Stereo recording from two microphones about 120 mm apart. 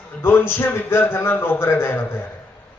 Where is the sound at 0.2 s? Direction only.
20° left (ahead or behind).